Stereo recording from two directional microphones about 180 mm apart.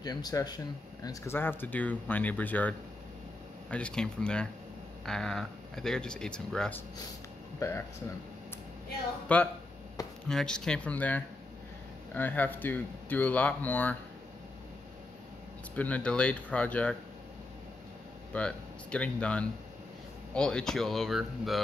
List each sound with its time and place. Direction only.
0.0 s speech: 20° left (ahead or behind)
3.7 s speech: 5° left (ahead or behind)
9.3 s speech: 10° left (ahead or behind)
15.7 s speech: 10° left (ahead or behind)
18.3 s speech: 5° left (ahead or behind)